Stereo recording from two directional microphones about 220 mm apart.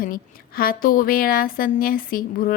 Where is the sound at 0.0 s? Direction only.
40° left (ahead or behind).